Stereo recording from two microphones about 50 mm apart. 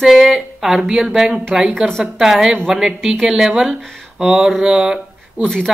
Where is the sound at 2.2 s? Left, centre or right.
Centre.